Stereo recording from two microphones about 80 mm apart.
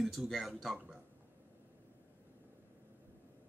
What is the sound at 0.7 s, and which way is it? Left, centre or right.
Speech, centre.